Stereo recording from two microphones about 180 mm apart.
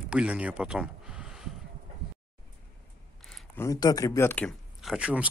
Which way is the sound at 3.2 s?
Centre (ahead or behind).